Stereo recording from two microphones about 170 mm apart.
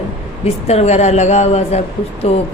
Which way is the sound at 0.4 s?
40° left (ahead or behind).